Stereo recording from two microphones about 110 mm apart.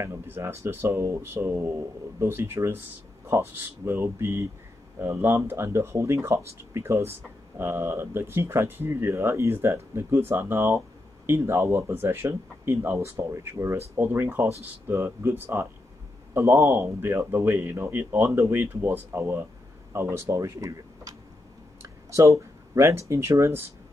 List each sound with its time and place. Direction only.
0.0 s speech: 25° right (ahead or behind)